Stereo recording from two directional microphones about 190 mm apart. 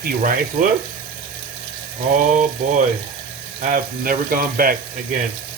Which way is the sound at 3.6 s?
45° right (ahead or behind).